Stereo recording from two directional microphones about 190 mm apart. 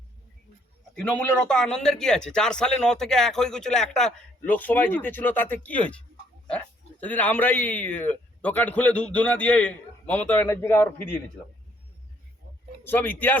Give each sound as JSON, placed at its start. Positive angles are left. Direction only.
{"t": 1.0, "sound": "a man's voice", "side_deg": 5}
{"t": 7.0, "sound": "a man's voice", "side_deg": 10}
{"t": 12.8, "sound": "a man's voice", "side_deg": 10}